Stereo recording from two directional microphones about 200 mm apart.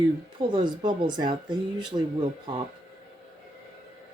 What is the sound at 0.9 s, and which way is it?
Speech, 20° right (ahead or behind).